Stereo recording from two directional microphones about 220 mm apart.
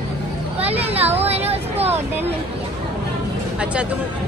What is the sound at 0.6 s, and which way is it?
Speech, 25° right (ahead or behind).